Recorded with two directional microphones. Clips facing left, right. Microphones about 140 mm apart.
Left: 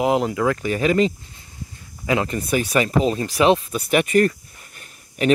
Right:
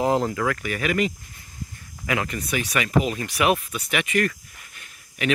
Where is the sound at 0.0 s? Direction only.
15° left (ahead or behind).